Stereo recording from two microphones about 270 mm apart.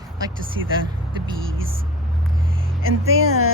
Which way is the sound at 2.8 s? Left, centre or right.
Right.